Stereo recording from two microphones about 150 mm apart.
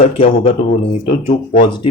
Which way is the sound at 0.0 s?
40° left (ahead or behind).